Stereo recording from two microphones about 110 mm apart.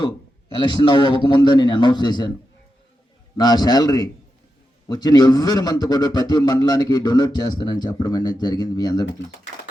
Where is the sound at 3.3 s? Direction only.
35° left (ahead or behind).